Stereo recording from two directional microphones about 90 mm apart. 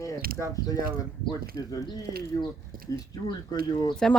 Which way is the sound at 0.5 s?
45° left (ahead or behind).